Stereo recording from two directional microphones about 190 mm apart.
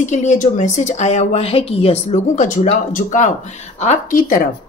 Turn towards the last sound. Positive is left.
turn(degrees=45)  # may be behind; listen again after turning